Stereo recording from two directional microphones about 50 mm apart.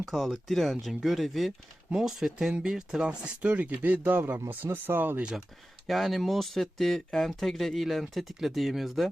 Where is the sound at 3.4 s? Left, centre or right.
Right.